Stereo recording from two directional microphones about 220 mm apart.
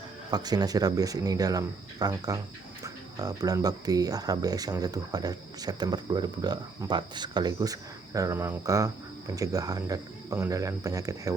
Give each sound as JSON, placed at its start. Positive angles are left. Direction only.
{"t": 0.3, "sound": "speech", "side_deg": -20}